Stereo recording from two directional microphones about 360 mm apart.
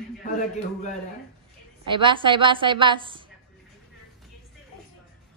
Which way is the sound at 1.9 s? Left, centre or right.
Centre.